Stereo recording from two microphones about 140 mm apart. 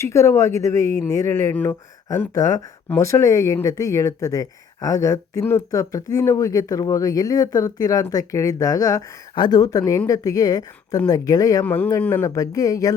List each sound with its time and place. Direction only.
0.0 s speech: 20° left (ahead or behind)
11.6 s speech: 10° left (ahead or behind)